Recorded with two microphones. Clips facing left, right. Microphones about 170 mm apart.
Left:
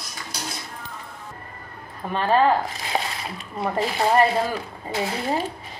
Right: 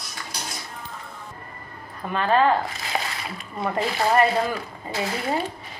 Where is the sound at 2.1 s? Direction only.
Centre (ahead or behind).